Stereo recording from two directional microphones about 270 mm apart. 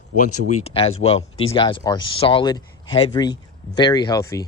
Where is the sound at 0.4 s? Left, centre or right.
Left.